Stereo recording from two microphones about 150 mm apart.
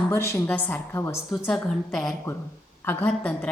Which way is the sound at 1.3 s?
5° left (ahead or behind).